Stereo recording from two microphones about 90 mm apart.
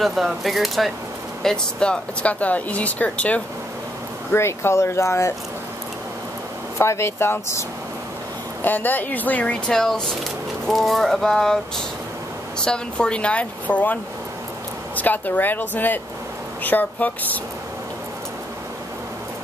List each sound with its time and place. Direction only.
0.0 s speech: centre (ahead or behind); by 3.4 s 15° left (ahead or behind)
4.3 s speech: 30° left (ahead or behind)
6.8 s speech: 30° left (ahead or behind)
8.6 s speech: 20° left (ahead or behind)
15.0 s speech: 20° left (ahead or behind)